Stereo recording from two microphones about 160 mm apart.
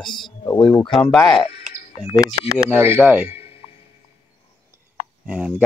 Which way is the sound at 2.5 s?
10° right (ahead or behind).